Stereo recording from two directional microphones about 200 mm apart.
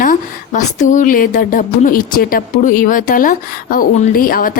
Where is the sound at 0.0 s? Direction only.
40° left (ahead or behind).